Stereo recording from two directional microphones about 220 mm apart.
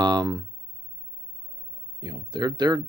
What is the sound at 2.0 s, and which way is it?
Speech, 20° right (ahead or behind).